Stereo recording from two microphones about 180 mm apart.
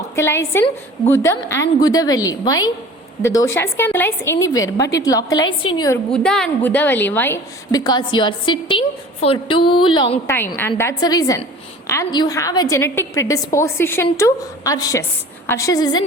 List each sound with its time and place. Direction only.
0.2 s a woman's voice: 15° left (ahead or behind)
6.1 s a woman's voice: 5° left (ahead or behind); by 10.2 s 25° left (ahead or behind)
10.2 s a woman's voice: 10° left (ahead or behind)